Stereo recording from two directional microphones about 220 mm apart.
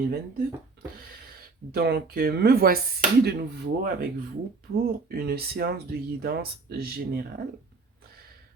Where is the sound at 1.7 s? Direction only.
45° right (ahead or behind).